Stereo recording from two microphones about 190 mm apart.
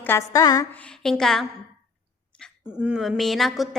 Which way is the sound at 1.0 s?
Centre (ahead or behind).